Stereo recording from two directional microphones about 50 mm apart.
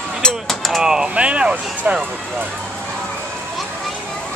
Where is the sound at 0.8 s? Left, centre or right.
Centre.